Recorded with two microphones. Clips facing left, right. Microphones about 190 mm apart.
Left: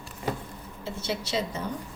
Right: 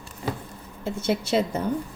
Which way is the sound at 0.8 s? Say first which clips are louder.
Right 7 dB; 50° right (ahead or behind).